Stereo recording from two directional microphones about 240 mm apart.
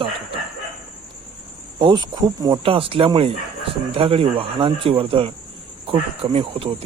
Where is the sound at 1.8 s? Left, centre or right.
Centre.